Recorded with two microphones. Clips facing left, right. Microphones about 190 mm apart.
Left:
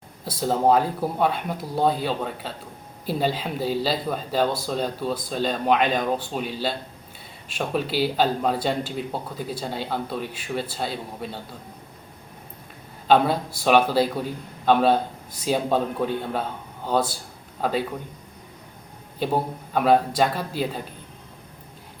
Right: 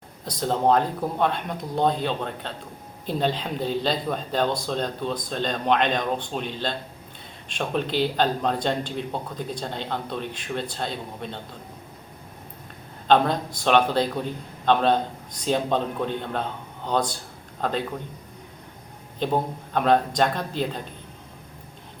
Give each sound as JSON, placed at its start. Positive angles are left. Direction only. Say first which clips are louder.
{"t": 0.3, "sound": "a man's voice", "louder": "left 1 dB", "side_deg": 5}
{"t": 13.1, "sound": "a man's voice", "louder": "left 1 dB", "side_deg": 5}
{"t": 19.2, "sound": "a man's voice", "louder": "even", "side_deg": 5}